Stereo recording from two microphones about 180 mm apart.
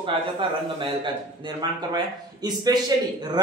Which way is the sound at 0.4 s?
30° right (ahead or behind).